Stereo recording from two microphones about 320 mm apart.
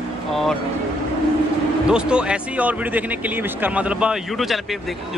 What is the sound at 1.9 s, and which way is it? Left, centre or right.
Speech, centre.